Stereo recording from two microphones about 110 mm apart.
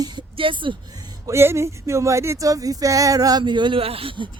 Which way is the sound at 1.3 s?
25° right (ahead or behind).